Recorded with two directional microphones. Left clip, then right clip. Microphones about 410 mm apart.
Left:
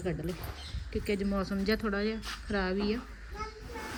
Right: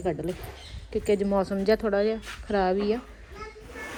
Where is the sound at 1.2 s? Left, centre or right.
Right.